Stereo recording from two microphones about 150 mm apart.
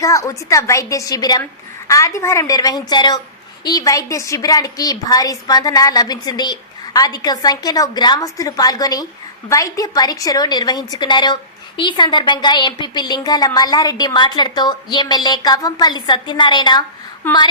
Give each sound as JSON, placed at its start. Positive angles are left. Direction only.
{"t": 0.0, "sound": "a woman's voice", "side_deg": 20}